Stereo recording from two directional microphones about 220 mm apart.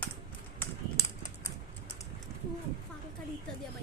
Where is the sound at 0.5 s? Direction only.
10° left (ahead or behind).